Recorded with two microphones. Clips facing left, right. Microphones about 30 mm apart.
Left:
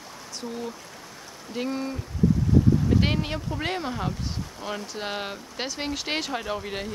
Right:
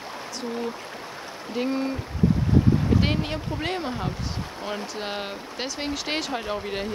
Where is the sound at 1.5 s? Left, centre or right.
Centre.